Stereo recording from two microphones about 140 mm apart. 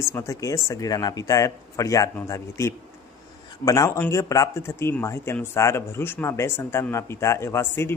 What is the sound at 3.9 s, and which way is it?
Speech, 15° left (ahead or behind).